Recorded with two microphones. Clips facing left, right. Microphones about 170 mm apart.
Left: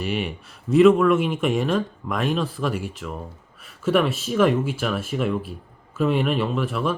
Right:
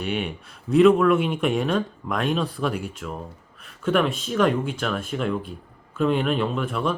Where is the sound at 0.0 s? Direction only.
Centre (ahead or behind).